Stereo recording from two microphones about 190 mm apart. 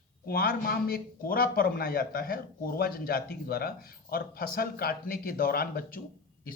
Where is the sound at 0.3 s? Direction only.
50° left (ahead or behind).